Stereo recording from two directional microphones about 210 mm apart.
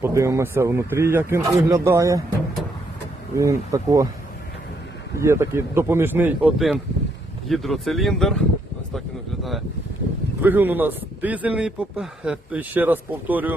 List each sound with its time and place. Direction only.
0.0 s speech: 15° right (ahead or behind)
3.3 s speech: 15° right (ahead or behind)
5.2 s speech: 15° right (ahead or behind); by 8.4 s 5° left (ahead or behind)
9.4 s a sound: centre (ahead or behind)
10.4 s speech: 10° right (ahead or behind)